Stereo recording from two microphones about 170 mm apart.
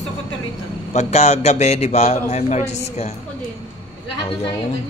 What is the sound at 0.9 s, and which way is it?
A man's voice, 40° left (ahead or behind).